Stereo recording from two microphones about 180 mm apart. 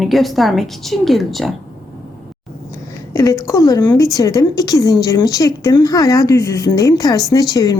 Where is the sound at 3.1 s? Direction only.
15° left (ahead or behind).